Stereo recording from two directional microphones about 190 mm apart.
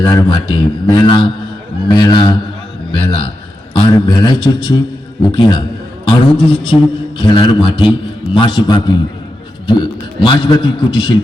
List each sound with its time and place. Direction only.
0.0 s a man's voice: 20° left (ahead or behind)